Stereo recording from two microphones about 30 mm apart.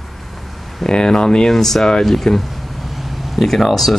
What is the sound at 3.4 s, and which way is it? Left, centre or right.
Speech, centre.